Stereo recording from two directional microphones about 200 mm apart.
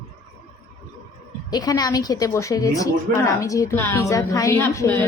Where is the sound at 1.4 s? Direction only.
20° left (ahead or behind).